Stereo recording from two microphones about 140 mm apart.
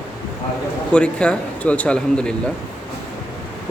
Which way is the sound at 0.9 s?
5° left (ahead or behind).